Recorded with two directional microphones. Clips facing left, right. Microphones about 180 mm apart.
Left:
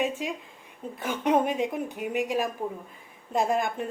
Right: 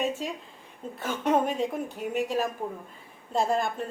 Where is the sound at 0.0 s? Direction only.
15° left (ahead or behind).